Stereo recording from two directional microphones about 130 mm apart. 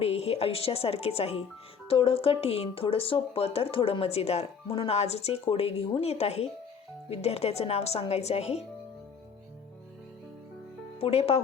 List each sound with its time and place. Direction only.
0.0 s speech: 50° left (ahead or behind)
11.0 s speech: 50° left (ahead or behind)